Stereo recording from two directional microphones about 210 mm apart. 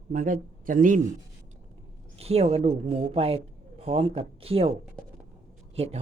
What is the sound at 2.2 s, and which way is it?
Speech, 30° right (ahead or behind).